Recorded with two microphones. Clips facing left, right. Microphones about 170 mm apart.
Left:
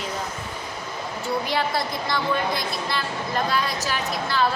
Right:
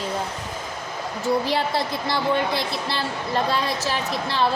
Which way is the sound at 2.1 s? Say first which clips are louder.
Right 2 dB; 25° right (ahead or behind).